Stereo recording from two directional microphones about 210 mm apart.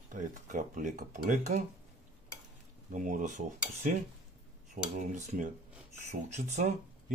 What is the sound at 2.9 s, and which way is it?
Speech, 40° right (ahead or behind).